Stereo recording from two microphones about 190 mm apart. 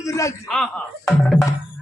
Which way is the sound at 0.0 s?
15° left (ahead or behind).